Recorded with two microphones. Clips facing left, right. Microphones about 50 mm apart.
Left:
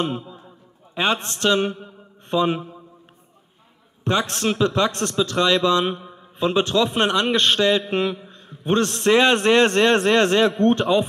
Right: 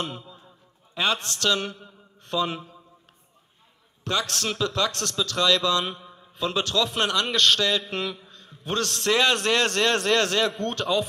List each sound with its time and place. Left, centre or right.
0.0 s a man's voice: left
4.0 s a man's voice: left